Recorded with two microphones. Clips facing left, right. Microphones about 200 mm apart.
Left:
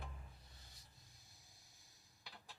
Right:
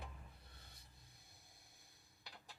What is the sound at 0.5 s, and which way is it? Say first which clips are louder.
Music: right 2 dB; 55° right (ahead or behind).